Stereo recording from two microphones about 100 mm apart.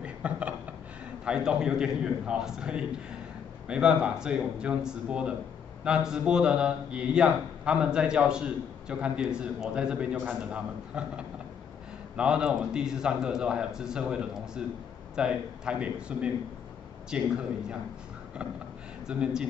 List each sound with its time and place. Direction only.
0.0 s a sound: 15° right (ahead or behind)
1.2 s a man's voice: 10° right (ahead or behind)
19.0 s a man's voice: 10° right (ahead or behind)